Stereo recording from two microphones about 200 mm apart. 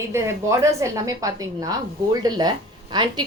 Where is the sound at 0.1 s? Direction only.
15° right (ahead or behind).